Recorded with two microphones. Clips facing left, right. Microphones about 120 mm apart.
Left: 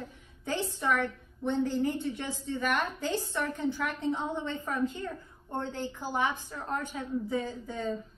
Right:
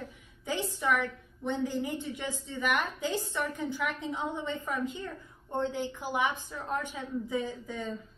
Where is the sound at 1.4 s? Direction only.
10° right (ahead or behind).